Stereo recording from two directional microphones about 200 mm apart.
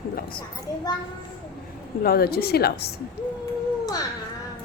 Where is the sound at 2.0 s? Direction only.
50° left (ahead or behind).